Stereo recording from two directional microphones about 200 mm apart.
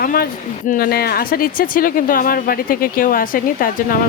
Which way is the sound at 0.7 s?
50° left (ahead or behind).